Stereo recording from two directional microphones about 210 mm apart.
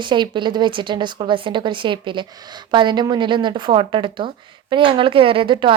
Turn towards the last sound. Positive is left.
turn(degrees=-25)  # may be behind; listen again after turning